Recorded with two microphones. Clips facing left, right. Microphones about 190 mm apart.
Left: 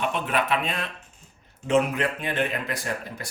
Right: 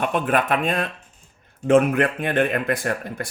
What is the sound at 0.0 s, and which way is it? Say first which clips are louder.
Speech: right 5 dB; 50° right (ahead or behind).